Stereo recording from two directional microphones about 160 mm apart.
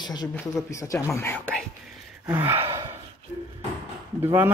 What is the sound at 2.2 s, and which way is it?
Speech, 15° right (ahead or behind).